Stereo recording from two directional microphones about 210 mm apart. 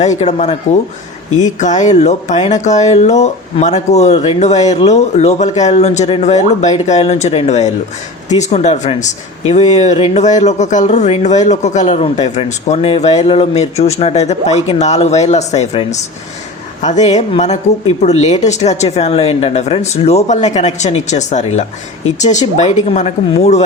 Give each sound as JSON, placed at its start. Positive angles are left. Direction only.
{"t": 0.0, "sound": "speech", "side_deg": 35}